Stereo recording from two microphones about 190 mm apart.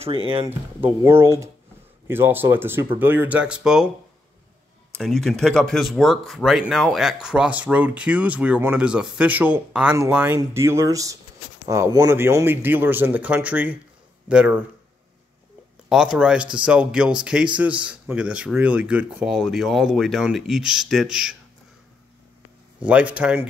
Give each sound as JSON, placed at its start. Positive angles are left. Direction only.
{"t": 0.0, "sound": "speech", "side_deg": -30}
{"t": 0.5, "sound": "speech", "side_deg": -10}
{"t": 4.9, "sound": "speech", "side_deg": 0}
{"t": 15.9, "sound": "speech", "side_deg": -5}
{"t": 22.8, "sound": "speech", "side_deg": -5}